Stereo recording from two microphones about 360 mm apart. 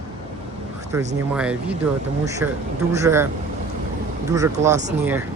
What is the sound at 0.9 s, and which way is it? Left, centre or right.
Speech, centre.